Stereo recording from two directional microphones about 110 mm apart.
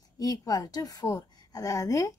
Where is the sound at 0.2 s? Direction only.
35° left (ahead or behind).